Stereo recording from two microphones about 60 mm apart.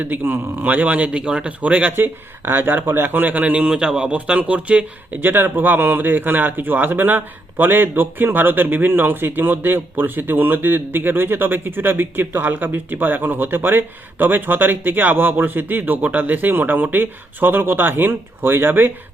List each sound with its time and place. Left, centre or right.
0.0 s speech: right
2.0 s speech: right
5.2 s speech: right